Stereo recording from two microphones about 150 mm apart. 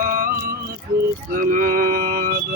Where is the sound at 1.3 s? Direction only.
65° right (ahead or behind).